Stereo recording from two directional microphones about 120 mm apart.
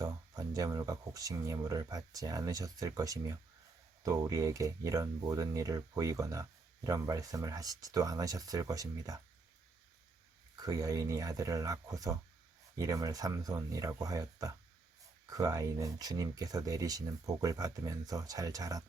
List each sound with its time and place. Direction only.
0.0 s speech: 30° right (ahead or behind)
10.6 s speech: 30° right (ahead or behind)